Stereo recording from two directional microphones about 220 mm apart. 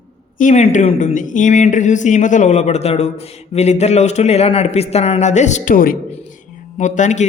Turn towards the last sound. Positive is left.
turn(degrees=35)  # may be behind; listen again after turning